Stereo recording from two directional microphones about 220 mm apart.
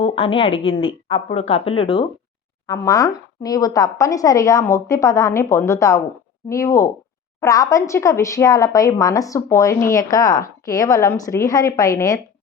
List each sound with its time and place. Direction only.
0.0 s a woman's voice: 25° left (ahead or behind)